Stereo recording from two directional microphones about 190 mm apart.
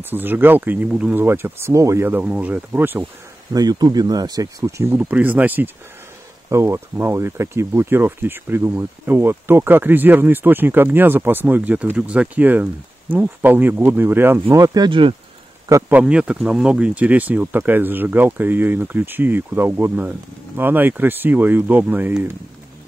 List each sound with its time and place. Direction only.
0.0 s speech: 10° right (ahead or behind)
3.5 s speech: 20° right (ahead or behind)
15.7 s speech: 10° right (ahead or behind)